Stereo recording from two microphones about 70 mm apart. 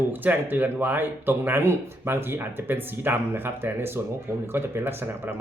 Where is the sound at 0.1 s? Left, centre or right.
Right.